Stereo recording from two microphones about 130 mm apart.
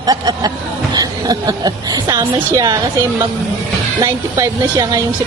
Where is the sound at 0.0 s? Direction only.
30° right (ahead or behind).